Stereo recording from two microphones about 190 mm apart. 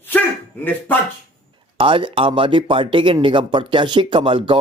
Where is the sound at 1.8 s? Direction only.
25° right (ahead or behind).